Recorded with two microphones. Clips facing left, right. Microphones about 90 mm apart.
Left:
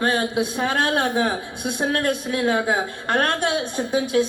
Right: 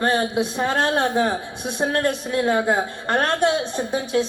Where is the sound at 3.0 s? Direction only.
15° right (ahead or behind).